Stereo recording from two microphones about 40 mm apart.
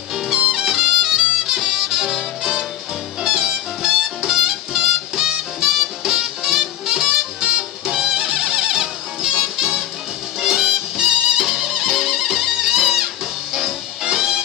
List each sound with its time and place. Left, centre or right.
0.5 s music: centre